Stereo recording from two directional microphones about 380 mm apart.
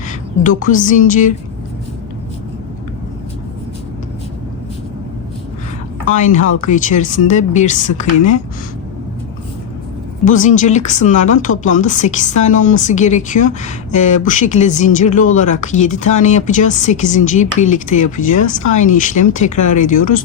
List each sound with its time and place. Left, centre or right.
0.6 s speech: centre
6.1 s speech: centre
10.2 s speech: centre